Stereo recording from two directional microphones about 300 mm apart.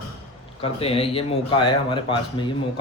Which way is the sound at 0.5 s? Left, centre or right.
Centre.